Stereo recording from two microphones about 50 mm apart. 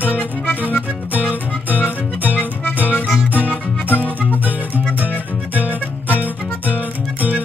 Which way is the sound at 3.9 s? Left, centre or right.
Right.